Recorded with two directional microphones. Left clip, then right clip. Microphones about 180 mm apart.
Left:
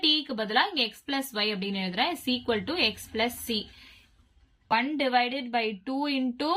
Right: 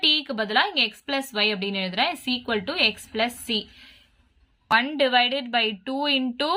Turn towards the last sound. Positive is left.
turn(degrees=-30)  # may be behind; listen again after turning